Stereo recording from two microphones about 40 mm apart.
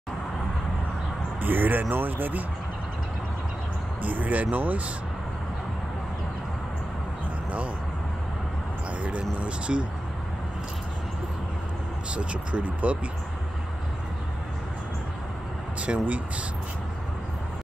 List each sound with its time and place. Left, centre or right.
1.4 s speech: right
4.0 s speech: right
9.4 s speech: right
12.1 s speech: right
15.8 s speech: right